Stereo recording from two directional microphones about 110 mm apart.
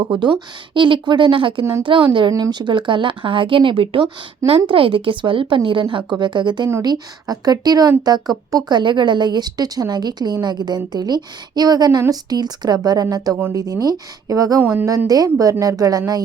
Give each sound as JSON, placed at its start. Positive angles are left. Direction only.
{"t": 0.0, "sound": "a woman's voice", "side_deg": -45}
{"t": 13.3, "sound": "speech", "side_deg": -20}
{"t": 13.6, "sound": "a woman's voice", "side_deg": -35}
{"t": 14.6, "sound": "a woman's voice", "side_deg": -15}
{"t": 14.8, "sound": "a woman's voice", "side_deg": -30}